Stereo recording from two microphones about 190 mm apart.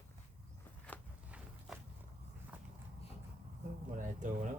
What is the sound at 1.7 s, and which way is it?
Walk, centre (ahead or behind).